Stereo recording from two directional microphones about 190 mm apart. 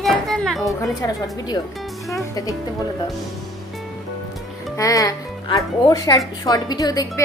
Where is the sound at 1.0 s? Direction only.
20° left (ahead or behind).